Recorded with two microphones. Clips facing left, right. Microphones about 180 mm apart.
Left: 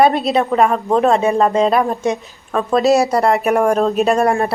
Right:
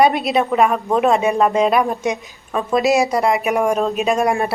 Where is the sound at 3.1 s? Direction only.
35° left (ahead or behind).